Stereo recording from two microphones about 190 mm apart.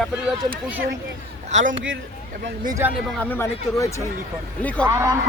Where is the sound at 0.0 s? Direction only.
5° right (ahead or behind).